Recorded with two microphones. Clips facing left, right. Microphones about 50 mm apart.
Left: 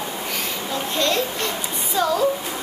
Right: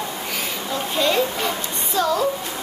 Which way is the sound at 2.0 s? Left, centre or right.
Centre.